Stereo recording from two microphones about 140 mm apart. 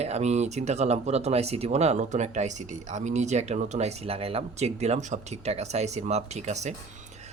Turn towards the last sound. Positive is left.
turn(degrees=-55)  # may be behind; listen again after turning